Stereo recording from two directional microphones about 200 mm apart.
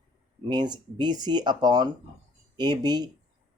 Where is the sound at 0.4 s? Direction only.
20° right (ahead or behind).